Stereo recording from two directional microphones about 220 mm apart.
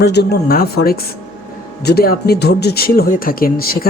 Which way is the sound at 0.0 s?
50° left (ahead or behind).